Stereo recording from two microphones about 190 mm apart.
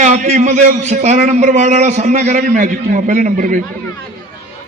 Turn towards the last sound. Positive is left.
turn(degrees=-45)  # may be behind; listen again after turning